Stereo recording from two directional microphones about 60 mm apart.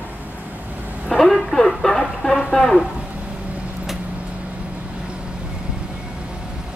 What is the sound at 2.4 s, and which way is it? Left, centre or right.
Speech, centre.